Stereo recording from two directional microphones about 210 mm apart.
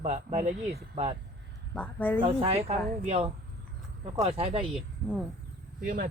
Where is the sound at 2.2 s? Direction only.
25° right (ahead or behind).